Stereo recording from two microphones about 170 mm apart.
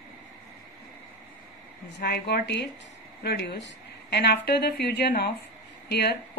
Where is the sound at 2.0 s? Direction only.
70° left (ahead or behind).